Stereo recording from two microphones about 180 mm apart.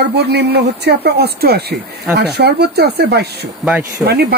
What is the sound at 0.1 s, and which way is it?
Speech, 65° right (ahead or behind).